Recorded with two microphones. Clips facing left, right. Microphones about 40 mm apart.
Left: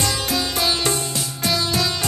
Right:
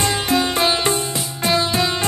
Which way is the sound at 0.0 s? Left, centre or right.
Right.